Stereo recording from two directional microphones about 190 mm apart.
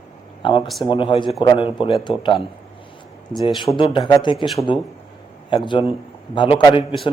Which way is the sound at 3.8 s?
25° left (ahead or behind).